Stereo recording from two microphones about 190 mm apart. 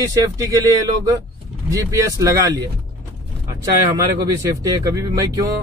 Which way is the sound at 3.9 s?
20° right (ahead or behind).